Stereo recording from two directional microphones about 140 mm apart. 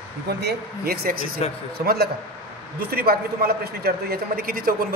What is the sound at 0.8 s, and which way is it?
Speech, 90° right.